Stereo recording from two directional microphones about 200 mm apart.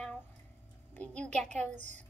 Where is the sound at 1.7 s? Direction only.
35° right (ahead or behind).